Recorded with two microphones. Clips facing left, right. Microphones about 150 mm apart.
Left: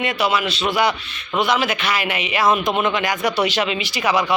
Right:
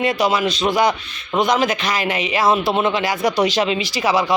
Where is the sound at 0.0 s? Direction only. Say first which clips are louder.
Right 3 dB; 35° right (ahead or behind).